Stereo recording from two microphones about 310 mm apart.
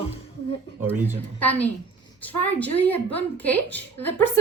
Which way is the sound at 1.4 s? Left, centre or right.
Centre.